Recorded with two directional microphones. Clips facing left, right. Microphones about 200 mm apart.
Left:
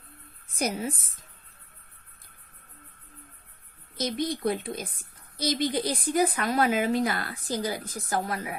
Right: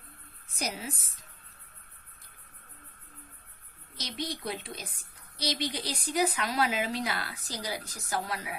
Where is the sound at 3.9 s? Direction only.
50° left (ahead or behind).